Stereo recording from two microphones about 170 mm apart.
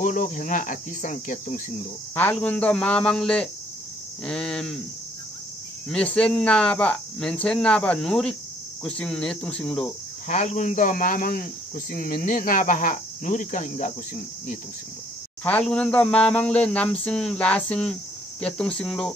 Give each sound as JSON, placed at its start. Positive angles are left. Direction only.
{"t": 0.0, "sound": "speech", "side_deg": 50}
{"t": 2.1, "sound": "speech", "side_deg": 10}
{"t": 5.9, "sound": "speech", "side_deg": 5}
{"t": 10.2, "sound": "speech", "side_deg": 45}
{"t": 15.4, "sound": "speech", "side_deg": 5}